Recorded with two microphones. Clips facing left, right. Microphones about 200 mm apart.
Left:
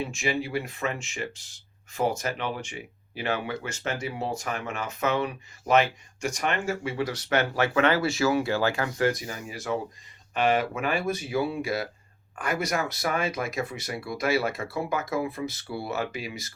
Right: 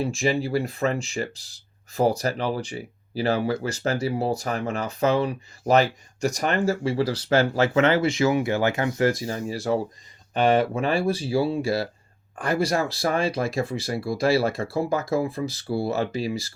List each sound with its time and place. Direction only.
0.0 s speech: 35° right (ahead or behind)